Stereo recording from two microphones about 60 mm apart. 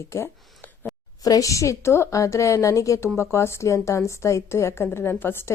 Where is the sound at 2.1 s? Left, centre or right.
Left.